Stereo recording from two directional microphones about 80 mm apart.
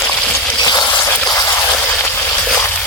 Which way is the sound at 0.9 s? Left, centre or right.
Left.